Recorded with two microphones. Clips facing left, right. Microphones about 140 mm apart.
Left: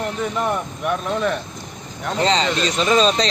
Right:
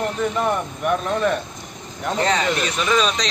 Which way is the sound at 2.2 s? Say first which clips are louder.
Left 2 dB; 20° left (ahead or behind).